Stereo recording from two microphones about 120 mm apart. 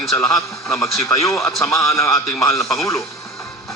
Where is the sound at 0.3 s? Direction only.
25° left (ahead or behind).